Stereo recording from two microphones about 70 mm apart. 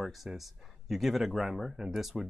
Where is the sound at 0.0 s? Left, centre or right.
Centre.